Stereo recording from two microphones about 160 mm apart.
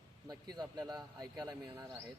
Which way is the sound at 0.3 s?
25° right (ahead or behind).